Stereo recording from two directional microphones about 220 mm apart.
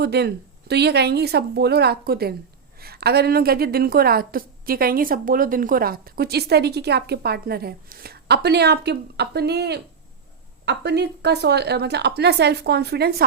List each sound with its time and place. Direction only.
0.0 s a woman's voice: 50° right (ahead or behind)